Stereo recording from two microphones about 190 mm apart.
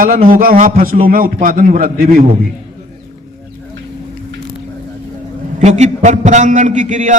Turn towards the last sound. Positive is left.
turn(degrees=-40)  # may be behind; listen again after turning